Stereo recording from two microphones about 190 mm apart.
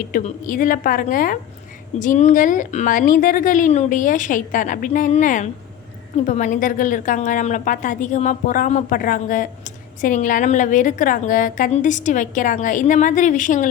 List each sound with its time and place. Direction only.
0.1 s a woman's voice: 40° left (ahead or behind)